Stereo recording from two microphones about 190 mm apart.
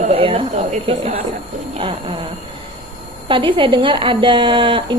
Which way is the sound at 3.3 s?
25° right (ahead or behind).